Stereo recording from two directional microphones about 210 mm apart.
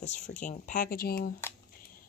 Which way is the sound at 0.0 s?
35° left (ahead or behind).